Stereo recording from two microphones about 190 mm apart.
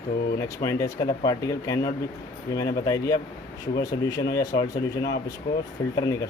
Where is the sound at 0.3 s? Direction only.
15° left (ahead or behind).